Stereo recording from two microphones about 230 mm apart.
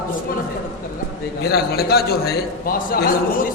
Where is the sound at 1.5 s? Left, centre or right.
Left.